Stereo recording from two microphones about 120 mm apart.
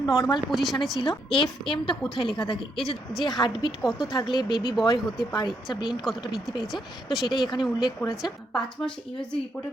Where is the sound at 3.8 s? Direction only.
5° right (ahead or behind).